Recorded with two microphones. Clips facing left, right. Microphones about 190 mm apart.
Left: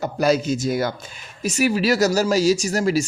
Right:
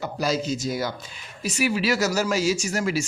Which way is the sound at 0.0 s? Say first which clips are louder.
Left 6 dB; 55° left (ahead or behind).